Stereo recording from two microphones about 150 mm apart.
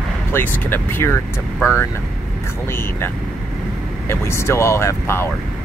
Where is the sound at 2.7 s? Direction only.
15° left (ahead or behind).